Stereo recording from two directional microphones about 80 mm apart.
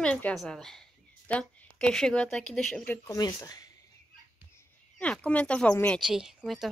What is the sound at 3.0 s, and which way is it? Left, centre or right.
Speech, left.